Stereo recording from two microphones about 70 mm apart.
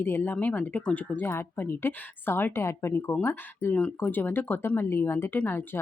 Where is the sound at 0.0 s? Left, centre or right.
Left; by 1.2 s centre.